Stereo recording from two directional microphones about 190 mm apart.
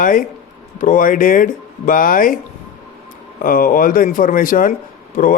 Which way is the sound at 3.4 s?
45° left (ahead or behind).